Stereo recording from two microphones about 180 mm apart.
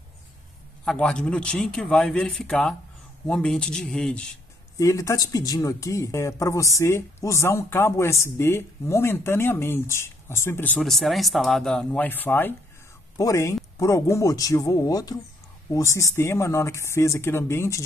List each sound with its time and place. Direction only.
0.8 s a man's voice: 5° left (ahead or behind)
4.7 s speech: 15° left (ahead or behind)